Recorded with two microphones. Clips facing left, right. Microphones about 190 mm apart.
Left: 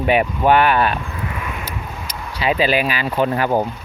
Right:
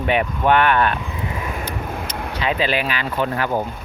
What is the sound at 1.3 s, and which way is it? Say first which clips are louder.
Vehicle: right 1 dB; 30° right (ahead or behind).